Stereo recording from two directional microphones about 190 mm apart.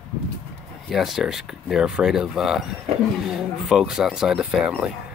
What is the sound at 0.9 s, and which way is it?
Speech, centre (ahead or behind).